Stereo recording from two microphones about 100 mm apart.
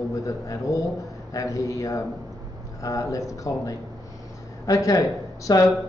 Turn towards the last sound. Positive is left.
turn(degrees=35)  # may be behind; listen again after turning